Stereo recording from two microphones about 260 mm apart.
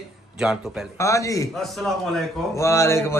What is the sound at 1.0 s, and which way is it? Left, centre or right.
Speech, centre.